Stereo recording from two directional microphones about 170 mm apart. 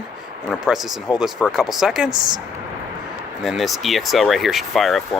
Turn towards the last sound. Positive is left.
turn(degrees=0)  # may be behind; listen again after turning